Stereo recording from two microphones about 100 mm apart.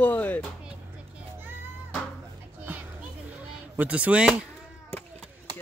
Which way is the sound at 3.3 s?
15° right (ahead or behind).